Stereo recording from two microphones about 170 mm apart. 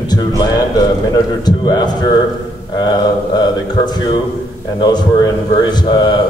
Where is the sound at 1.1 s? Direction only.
25° left (ahead or behind).